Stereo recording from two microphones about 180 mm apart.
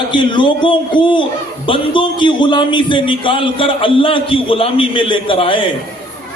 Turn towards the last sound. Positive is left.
turn(degrees=30)  # may be behind; listen again after turning